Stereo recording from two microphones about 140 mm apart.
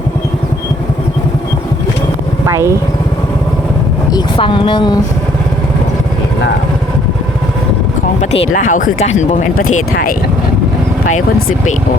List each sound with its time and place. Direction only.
2.5 s speech: 20° right (ahead or behind)
4.4 s speech: 35° left (ahead or behind)
8.5 s speech: 70° left (ahead or behind)
9.0 s speech: 55° left (ahead or behind); by 10.2 s 85° left